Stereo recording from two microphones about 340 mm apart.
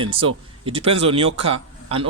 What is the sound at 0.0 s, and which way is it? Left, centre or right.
Speech, centre.